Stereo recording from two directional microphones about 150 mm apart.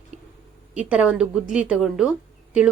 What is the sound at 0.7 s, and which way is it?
A woman's voice, 10° right (ahead or behind).